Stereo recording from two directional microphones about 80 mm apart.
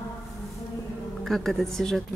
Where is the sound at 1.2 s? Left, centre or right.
Centre.